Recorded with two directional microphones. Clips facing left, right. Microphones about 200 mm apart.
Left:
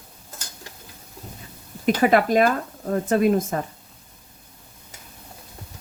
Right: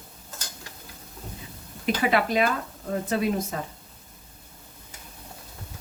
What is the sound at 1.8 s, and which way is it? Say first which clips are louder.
Speech: left 6 dB; 45° left (ahead or behind).